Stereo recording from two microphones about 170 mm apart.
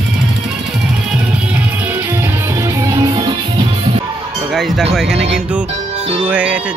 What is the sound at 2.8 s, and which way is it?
Music, 20° right (ahead or behind).